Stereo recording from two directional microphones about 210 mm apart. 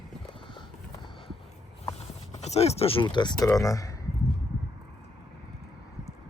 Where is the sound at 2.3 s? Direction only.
30° left (ahead or behind); by 3.9 s 15° left (ahead or behind).